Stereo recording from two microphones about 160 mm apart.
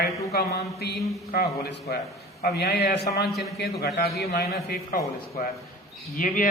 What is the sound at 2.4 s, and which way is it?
A man's voice, 75° left (ahead or behind).